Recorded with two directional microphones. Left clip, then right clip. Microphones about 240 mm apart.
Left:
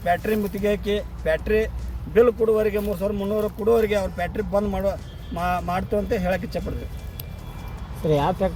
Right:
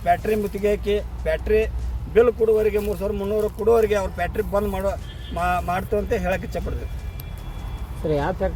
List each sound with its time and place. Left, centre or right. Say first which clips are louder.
0.0 s speech: right 2 dB; centre
8.1 s speech: left 2 dB; left